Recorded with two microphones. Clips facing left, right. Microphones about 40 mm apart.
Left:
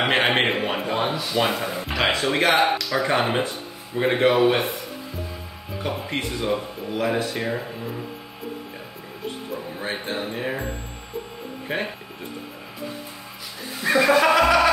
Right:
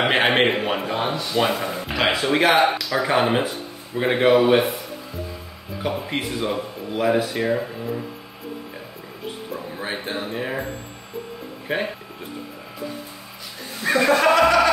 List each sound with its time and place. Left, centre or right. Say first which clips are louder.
0.0 s speech: right 2 dB; centre
5.8 s speech: right 2 dB; centre
9.8 s speech: even; centre
13.7 s speech: even; centre